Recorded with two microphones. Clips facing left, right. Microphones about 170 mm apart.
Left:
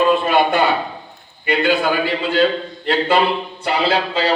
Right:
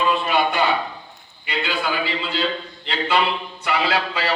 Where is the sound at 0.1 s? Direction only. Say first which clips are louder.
Left 5 dB; 50° left (ahead or behind).